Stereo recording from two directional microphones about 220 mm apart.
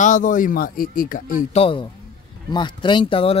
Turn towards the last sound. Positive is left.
turn(degrees=25)  # may be behind; listen again after turning